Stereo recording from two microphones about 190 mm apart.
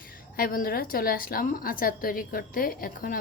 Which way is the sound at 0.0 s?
50° left (ahead or behind).